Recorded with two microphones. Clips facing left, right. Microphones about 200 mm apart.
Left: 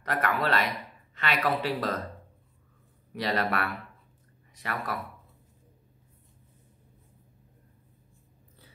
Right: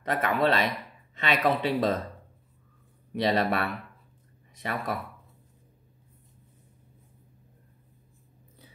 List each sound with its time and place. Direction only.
0.0 s speech: 20° right (ahead or behind)
3.2 s speech: 25° right (ahead or behind)